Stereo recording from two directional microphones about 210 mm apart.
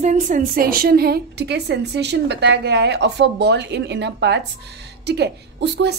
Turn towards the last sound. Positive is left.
turn(degrees=-55)  # may be behind; listen again after turning